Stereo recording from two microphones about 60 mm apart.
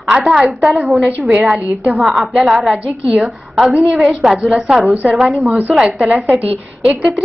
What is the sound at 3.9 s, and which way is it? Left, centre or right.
A woman's voice, centre.